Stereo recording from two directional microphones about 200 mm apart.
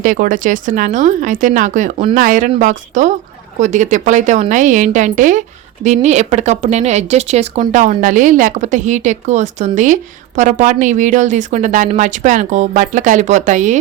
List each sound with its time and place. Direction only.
0.0 s a woman's voice: 40° right (ahead or behind)